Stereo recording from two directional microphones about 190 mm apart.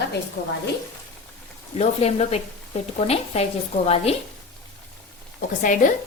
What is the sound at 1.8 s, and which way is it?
A woman's voice, 35° left (ahead or behind).